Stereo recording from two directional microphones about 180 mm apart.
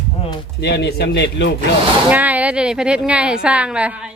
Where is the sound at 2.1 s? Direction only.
10° right (ahead or behind).